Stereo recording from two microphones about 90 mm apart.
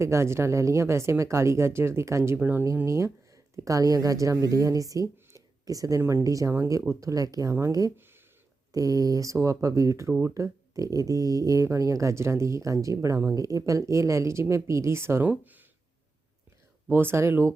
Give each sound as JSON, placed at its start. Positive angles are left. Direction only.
{"t": 0.0, "sound": "speech", "side_deg": -30}
{"t": 2.8, "sound": "speech", "side_deg": -35}
{"t": 5.1, "sound": "a sound", "side_deg": -40}
{"t": 6.0, "sound": "speech", "side_deg": -30}
{"t": 10.1, "sound": "speech", "side_deg": -25}
{"t": 16.9, "sound": "speech", "side_deg": -25}